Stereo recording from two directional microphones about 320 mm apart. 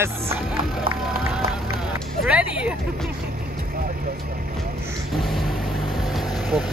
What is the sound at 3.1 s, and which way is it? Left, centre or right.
Vehicle, right.